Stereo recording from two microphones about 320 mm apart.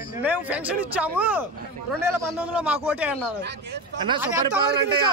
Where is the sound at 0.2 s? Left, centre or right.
Centre.